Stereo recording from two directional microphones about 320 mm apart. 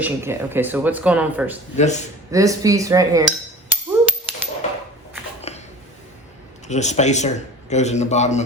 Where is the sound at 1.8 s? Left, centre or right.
Left.